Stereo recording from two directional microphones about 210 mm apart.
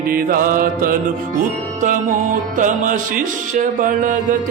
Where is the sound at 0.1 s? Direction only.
45° right (ahead or behind).